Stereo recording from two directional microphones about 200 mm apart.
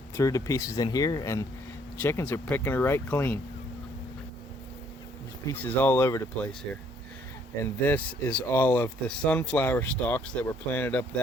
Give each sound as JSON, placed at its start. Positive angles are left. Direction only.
{"t": 0.2, "sound": "speech", "side_deg": 15}
{"t": 5.5, "sound": "speech", "side_deg": 10}